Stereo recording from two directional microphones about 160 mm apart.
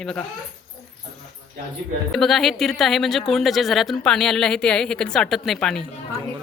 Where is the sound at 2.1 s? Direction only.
Centre (ahead or behind).